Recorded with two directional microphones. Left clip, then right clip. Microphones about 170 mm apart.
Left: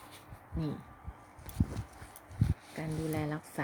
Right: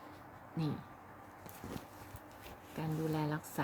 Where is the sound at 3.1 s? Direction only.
20° left (ahead or behind).